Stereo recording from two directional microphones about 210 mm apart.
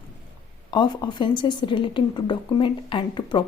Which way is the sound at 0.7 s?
20° left (ahead or behind).